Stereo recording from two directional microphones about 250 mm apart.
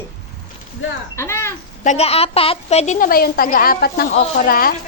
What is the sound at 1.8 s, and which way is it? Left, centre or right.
A woman's voice, left.